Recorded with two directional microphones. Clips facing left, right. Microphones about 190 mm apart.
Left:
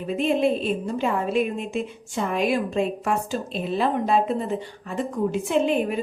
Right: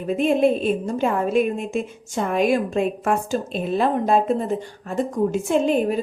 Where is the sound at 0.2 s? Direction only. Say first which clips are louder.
Right 3 dB; 50° right (ahead or behind).